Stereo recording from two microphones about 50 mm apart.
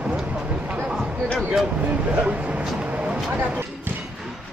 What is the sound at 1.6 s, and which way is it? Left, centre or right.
Speech, right.